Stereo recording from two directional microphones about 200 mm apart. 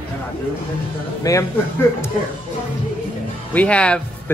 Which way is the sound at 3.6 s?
5° left (ahead or behind).